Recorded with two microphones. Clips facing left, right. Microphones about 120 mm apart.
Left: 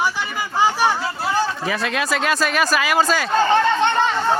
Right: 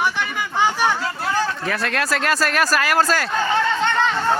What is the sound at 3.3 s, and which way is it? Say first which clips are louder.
Speech: left 7 dB; 30° left (ahead or behind).